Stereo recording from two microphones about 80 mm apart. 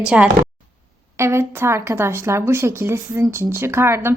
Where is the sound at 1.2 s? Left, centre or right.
Right.